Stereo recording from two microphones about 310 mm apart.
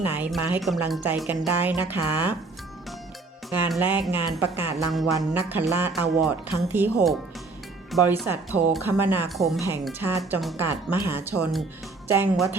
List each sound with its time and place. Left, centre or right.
0.1 s speech: centre
3.5 s speech: centre